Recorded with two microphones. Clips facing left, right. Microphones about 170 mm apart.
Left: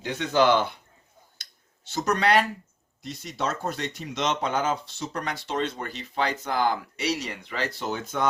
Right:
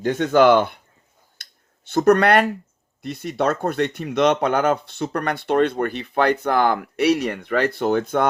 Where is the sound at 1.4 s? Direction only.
55° right (ahead or behind).